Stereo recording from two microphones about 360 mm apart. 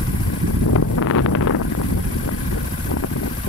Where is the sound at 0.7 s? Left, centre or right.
Left.